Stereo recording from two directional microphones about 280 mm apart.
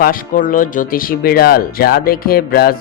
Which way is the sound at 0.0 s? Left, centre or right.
Left.